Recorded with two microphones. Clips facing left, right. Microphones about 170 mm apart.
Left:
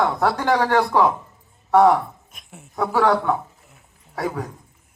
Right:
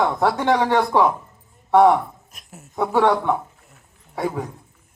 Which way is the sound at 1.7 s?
Centre (ahead or behind).